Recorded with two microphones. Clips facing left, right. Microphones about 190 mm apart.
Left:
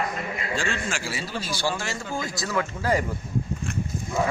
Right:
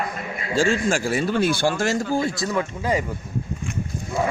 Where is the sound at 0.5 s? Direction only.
45° right (ahead or behind).